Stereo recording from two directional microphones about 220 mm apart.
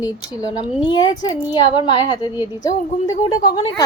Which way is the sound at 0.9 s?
20° left (ahead or behind).